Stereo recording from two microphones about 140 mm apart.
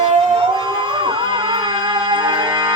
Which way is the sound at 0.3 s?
35° right (ahead or behind).